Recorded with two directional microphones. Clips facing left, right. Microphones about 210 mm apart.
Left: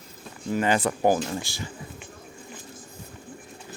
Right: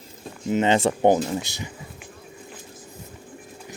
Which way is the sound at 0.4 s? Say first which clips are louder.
Right 4 dB; 20° right (ahead or behind).